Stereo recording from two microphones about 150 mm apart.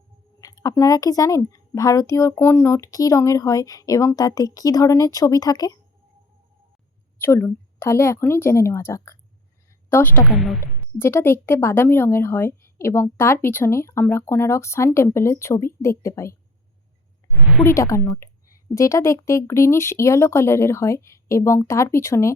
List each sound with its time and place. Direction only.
0.4 s speech: 25° left (ahead or behind)
7.2 s speech: 15° left (ahead or behind)
10.2 s a woman's voice: centre (ahead or behind)
10.9 s speech: 15° left (ahead or behind)
17.6 s speech: 20° left (ahead or behind)